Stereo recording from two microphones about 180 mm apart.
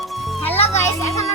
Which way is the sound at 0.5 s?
35° left (ahead or behind).